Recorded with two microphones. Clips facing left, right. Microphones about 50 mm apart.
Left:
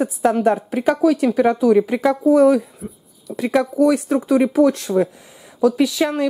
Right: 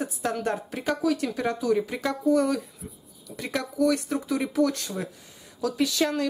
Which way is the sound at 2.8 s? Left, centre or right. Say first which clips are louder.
Left 9 dB; centre.